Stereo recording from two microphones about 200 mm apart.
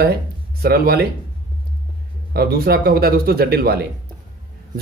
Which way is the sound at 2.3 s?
50° right (ahead or behind).